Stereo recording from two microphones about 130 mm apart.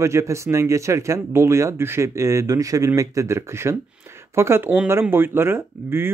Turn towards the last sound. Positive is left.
turn(degrees=-20)  # may be behind; listen again after turning